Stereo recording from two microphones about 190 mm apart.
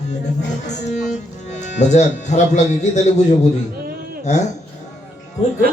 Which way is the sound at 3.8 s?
50° right (ahead or behind).